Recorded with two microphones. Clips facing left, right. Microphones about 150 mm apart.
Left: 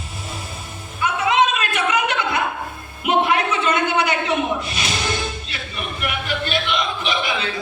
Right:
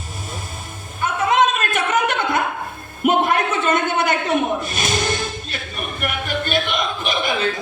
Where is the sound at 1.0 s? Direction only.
50° right (ahead or behind).